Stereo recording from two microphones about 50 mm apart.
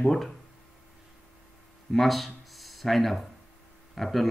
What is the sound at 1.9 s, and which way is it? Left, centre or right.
Speech, centre.